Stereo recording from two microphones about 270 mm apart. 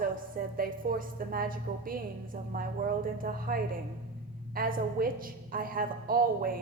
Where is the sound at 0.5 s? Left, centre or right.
Right.